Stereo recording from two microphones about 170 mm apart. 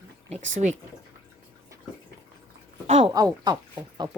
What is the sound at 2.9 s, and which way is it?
Speech, 40° right (ahead or behind).